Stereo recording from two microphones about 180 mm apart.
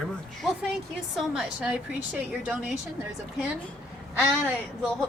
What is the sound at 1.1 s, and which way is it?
A woman's voice, 5° right (ahead or behind).